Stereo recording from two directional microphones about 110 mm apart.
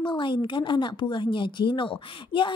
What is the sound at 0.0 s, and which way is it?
A woman's voice, 45° left (ahead or behind).